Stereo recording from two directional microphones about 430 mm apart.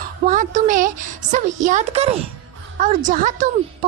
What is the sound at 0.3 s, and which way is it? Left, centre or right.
A woman's voice, centre.